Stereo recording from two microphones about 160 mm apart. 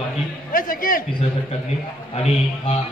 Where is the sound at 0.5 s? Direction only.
60° left (ahead or behind).